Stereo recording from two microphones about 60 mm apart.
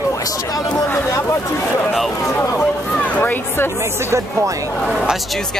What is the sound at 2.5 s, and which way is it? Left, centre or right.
Speech, left.